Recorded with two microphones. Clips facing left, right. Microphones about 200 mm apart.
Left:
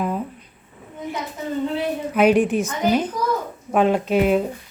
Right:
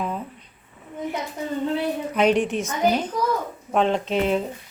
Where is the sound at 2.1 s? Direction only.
5° left (ahead or behind).